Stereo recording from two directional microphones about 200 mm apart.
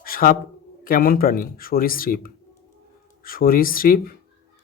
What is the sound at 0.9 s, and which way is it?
Speech, 45° left (ahead or behind).